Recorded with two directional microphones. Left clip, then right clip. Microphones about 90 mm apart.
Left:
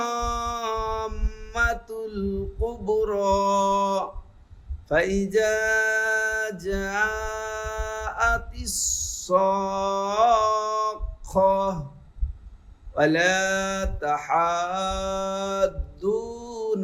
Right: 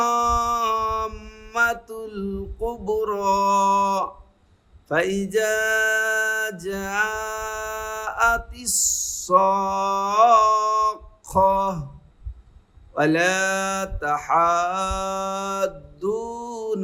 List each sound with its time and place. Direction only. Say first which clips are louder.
0.0 s a sound: right 7 dB; 40° right (ahead or behind)
4.9 s music: even; 35° right (ahead or behind)
12.9 s mantra: right 1 dB; 40° right (ahead or behind)